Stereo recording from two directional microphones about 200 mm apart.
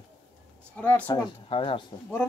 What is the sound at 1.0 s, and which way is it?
Speech, 25° left (ahead or behind).